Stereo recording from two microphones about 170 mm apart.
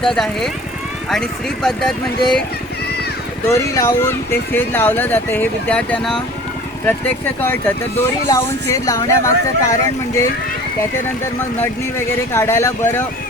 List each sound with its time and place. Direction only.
0.0 s speech: 5° left (ahead or behind)
3.5 s speech: 20° left (ahead or behind)
11.6 s speech: 15° left (ahead or behind)